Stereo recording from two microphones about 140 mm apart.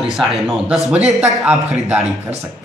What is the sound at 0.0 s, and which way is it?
A man's voice, centre (ahead or behind).